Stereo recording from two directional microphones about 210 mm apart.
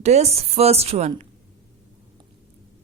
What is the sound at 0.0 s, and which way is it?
A woman's voice, 30° right (ahead or behind).